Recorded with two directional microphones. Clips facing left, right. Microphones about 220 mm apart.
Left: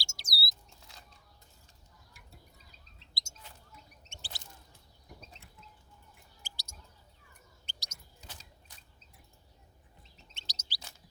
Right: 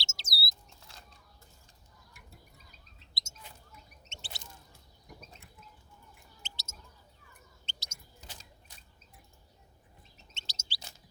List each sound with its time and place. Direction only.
0.0 s bird: 25° right (ahead or behind)
3.2 s a sound: 20° right (ahead or behind)
6.4 s bird: 25° right (ahead or behind)
10.3 s chirp: 25° right (ahead or behind)